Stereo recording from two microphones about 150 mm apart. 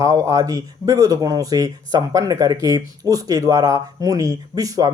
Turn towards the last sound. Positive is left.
turn(degrees=-25)  # may be behind; listen again after turning